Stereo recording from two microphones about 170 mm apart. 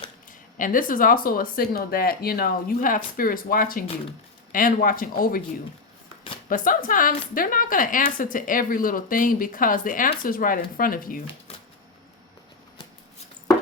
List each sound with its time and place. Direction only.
0.3 s a woman's voice: 50° left (ahead or behind)
6.5 s a woman's voice: 55° left (ahead or behind)